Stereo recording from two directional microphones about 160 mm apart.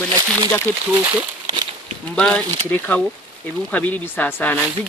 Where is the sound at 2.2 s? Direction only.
10° left (ahead or behind).